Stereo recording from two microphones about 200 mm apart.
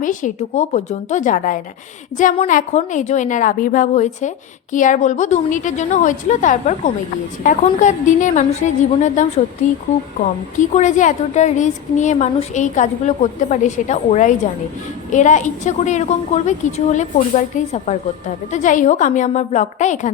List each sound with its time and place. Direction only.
0.0 s a woman's voice: 40° left (ahead or behind)
10.6 s a woman's voice: 40° left (ahead or behind)